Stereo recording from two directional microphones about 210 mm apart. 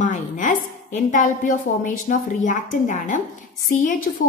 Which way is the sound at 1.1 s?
40° left (ahead or behind).